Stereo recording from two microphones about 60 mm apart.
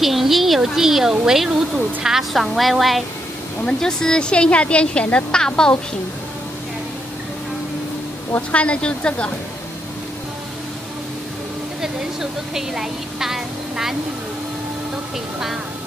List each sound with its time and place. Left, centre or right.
0.0 s a sound: centre
1.2 s a woman's voice: centre
3.6 s a woman's voice: centre
8.4 s speech: left
11.8 s a woman's voice: centre